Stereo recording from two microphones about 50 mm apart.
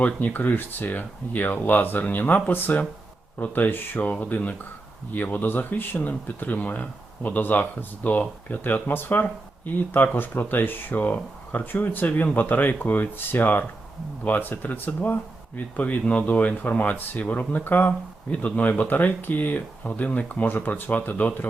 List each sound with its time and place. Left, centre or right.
0.0 s speech: left
3.9 s speech: left
18.3 s speech: left